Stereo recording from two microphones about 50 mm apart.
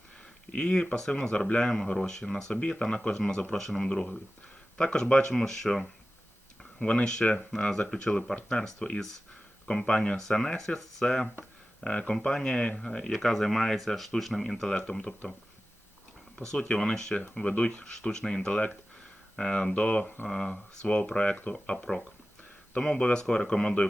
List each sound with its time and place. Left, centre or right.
0.5 s speech: centre
5.3 s speech: centre
6.6 s speech: centre
16.5 s speech: centre
21.9 s speech: centre
22.7 s speech: centre